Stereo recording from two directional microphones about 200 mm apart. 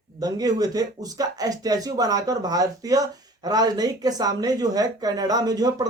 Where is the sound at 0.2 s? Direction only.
20° right (ahead or behind).